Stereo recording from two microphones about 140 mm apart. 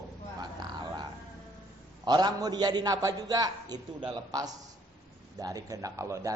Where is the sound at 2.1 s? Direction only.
30° right (ahead or behind).